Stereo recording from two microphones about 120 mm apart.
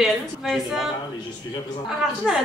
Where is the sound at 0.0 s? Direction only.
5° right (ahead or behind).